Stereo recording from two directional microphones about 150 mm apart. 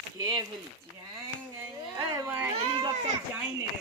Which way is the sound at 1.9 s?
20° right (ahead or behind).